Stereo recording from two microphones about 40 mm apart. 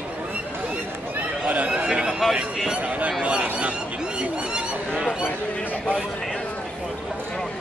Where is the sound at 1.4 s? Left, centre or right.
Right.